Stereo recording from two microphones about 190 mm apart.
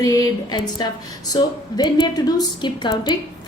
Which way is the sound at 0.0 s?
20° left (ahead or behind).